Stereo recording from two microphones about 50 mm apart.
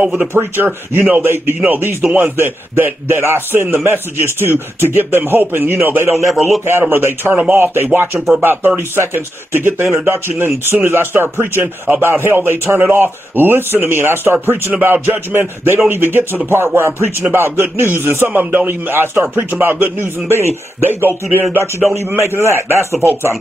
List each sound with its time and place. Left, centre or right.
0.0 s speech: centre
0.3 s a man's voice: right
6.1 s a man's voice: centre
6.6 s a man's voice: right
21.9 s a man's voice: right